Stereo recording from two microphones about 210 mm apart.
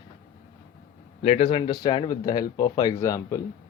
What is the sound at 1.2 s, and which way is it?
Speech, 30° left (ahead or behind).